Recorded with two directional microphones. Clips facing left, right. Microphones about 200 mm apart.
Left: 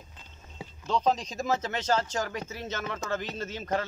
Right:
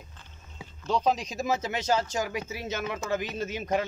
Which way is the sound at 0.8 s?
10° right (ahead or behind).